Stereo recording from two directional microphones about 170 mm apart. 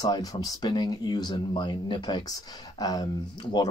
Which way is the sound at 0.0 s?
20° left (ahead or behind).